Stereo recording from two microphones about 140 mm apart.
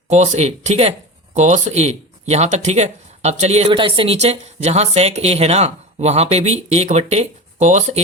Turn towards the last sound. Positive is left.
turn(degrees=-55)  # may be behind; listen again after turning